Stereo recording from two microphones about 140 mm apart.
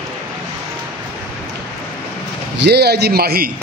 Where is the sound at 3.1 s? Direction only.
90° right.